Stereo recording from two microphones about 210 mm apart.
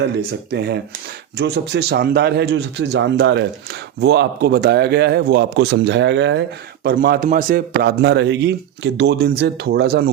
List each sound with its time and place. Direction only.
0.0 s speech: 55° right (ahead or behind)
6.8 s speech: 45° right (ahead or behind)